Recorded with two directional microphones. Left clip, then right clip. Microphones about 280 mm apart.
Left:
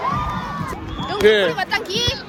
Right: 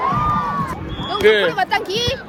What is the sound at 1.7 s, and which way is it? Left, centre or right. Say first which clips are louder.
Speech: right 1 dB; right.